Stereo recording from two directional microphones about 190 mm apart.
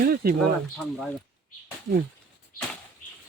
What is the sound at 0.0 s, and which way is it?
Speech, 50° right (ahead or behind).